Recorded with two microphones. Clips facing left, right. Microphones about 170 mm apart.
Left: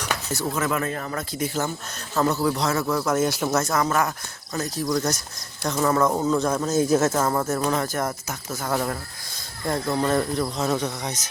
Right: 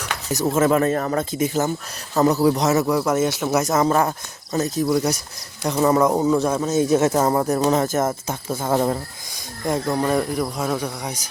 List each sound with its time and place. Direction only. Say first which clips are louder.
0.5 s speech: right 10 dB; 30° right (ahead or behind)
1.1 s speech: right 6 dB; 20° right (ahead or behind); by 3.5 s centre (ahead or behind)
3.5 s speech: right 4 dB; 20° right (ahead or behind)
4.9 s speech: right 4 dB; 10° right (ahead or behind)
7.1 s speech: right 4 dB; 15° right (ahead or behind)